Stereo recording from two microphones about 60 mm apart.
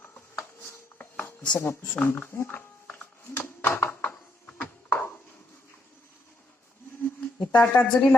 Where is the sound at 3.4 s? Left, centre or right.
Left.